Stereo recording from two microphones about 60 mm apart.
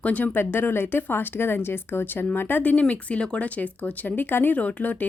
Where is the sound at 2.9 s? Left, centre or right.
Centre.